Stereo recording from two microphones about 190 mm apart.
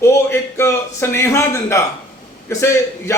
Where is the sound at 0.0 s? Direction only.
15° left (ahead or behind).